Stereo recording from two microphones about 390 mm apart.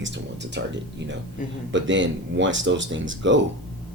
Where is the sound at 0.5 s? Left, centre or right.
Right.